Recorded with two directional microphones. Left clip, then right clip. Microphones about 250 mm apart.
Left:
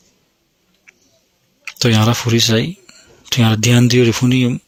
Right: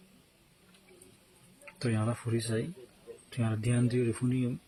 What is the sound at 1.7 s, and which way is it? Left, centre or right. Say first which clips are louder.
Speech: left 19 dB; left.